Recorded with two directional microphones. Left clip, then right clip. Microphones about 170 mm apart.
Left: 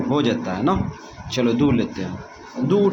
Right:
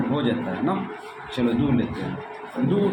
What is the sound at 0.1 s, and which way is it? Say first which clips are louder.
Speech: left 6 dB; 60° left (ahead or behind).